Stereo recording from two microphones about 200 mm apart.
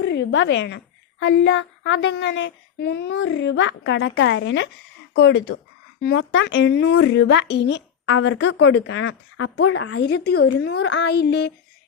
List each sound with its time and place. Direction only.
0.0 s a sound: 60° left (ahead or behind)
1.2 s speech: 65° left (ahead or behind)
6.0 s speech: 50° left (ahead or behind)
6.3 s speech: 65° left (ahead or behind); by 10.0 s 85° left
10.0 s speech: 55° left (ahead or behind)